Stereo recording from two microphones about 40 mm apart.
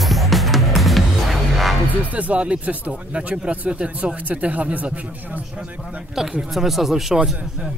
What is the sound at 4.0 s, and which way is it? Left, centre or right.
Speech, right.